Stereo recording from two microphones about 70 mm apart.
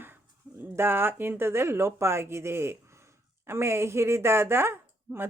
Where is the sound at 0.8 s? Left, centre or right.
Right.